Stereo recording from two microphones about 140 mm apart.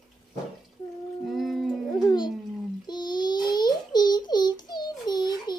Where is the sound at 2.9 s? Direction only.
30° left (ahead or behind).